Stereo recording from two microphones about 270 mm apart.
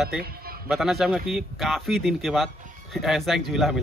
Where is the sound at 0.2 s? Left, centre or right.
Right.